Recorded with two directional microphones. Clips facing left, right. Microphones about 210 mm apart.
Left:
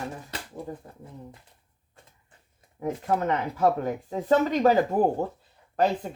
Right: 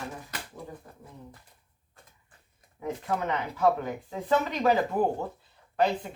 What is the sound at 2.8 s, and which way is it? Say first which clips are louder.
Speech: left 4 dB; 45° left (ahead or behind).